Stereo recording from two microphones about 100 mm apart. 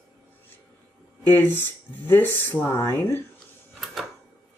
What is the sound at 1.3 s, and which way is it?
Speech, 20° left (ahead or behind).